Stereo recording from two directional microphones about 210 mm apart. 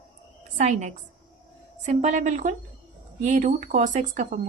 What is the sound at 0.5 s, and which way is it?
A woman's voice, 35° right (ahead or behind).